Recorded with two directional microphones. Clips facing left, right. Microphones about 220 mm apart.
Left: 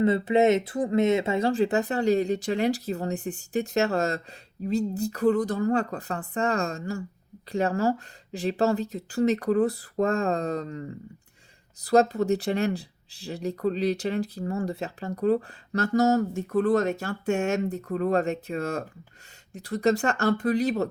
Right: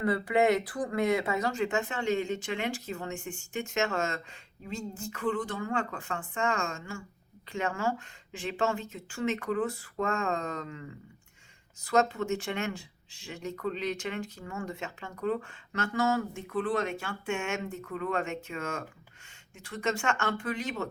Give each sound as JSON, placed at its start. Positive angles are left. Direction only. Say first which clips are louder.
{"t": 0.0, "sound": "speech", "louder": "left 5 dB", "side_deg": 25}